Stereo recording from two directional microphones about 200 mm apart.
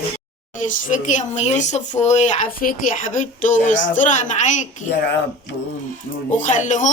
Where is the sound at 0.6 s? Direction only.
40° left (ahead or behind).